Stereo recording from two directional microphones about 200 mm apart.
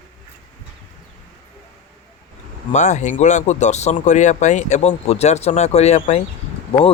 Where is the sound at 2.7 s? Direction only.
35° left (ahead or behind).